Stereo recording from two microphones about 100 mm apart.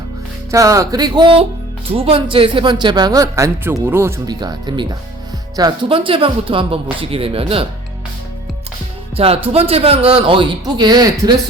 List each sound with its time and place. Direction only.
0.5 s speech: 35° right (ahead or behind)
1.9 s a man's voice: 70° right (ahead or behind); by 4.1 s 25° right (ahead or behind)
4.3 s a man's voice: 45° right (ahead or behind)
5.9 s a man's voice: 60° right (ahead or behind)
9.1 s a man's voice: 75° right (ahead or behind)
10.8 s a man's voice: 45° right (ahead or behind)